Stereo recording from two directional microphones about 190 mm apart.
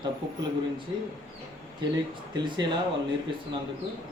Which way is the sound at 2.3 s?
25° right (ahead or behind).